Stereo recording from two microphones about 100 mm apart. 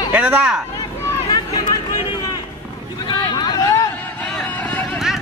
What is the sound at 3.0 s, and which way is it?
Vehicle, 45° left (ahead or behind).